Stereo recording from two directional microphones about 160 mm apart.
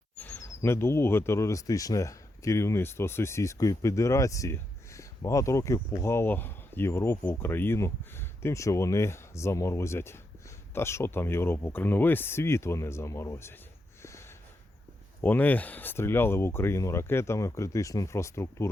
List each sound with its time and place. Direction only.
0.2 s speech: 15° left (ahead or behind)
14.0 s a sound: 15° left (ahead or behind)
15.2 s speech: 10° left (ahead or behind)